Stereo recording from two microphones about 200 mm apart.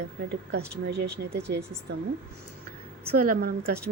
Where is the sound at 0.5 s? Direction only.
55° right (ahead or behind).